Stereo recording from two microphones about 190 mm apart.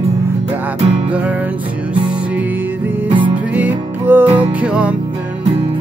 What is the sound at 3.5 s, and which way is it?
Music, 10° right (ahead or behind).